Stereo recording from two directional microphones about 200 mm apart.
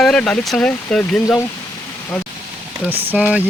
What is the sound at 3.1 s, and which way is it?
Speech, 5° right (ahead or behind).